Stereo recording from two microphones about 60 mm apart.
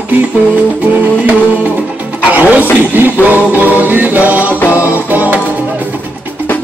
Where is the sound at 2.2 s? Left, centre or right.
Right.